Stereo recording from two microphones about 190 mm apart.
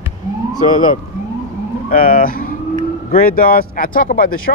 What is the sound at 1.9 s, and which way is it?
Speech, 50° left (ahead or behind).